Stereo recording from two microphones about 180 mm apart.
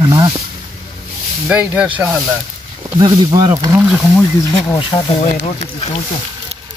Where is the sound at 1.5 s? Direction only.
5° right (ahead or behind).